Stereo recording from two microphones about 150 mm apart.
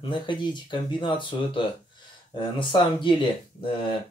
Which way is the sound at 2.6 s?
35° left (ahead or behind).